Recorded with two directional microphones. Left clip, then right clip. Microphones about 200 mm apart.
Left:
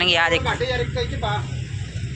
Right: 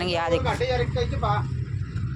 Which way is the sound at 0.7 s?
40° left (ahead or behind).